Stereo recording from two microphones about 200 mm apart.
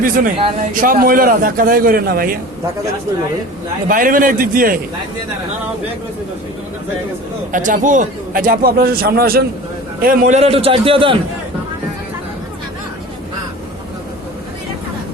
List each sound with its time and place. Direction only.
0.0 s a man's voice: 45° right (ahead or behind)
0.3 s a man's voice: 30° right (ahead or behind)
0.7 s a man's voice: 45° right (ahead or behind)
3.8 s a man's voice: 45° right (ahead or behind)
7.5 s a man's voice: 40° right (ahead or behind)